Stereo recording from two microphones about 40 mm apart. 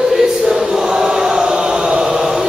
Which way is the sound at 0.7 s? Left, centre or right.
Centre.